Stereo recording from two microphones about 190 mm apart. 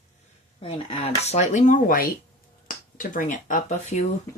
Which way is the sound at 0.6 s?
30° left (ahead or behind).